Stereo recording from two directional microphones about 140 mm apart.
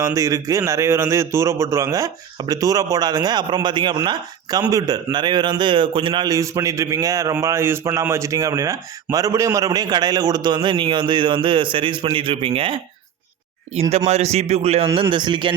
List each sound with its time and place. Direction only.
0.0 s a man's voice: 20° right (ahead or behind); by 14.8 s 45° right (ahead or behind)
15.1 s speech: 35° right (ahead or behind)